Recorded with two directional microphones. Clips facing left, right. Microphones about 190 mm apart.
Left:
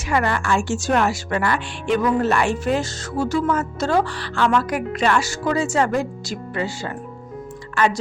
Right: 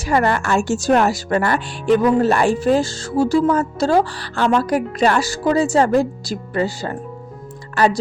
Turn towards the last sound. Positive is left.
turn(degrees=-35)  # may be behind; listen again after turning